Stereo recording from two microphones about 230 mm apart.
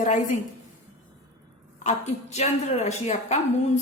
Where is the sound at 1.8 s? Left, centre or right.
Left.